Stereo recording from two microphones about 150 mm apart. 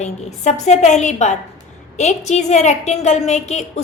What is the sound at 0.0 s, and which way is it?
A woman's voice, 50° left (ahead or behind).